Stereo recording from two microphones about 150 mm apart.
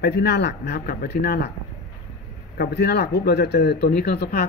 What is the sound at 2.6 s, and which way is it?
Speech, 90° left.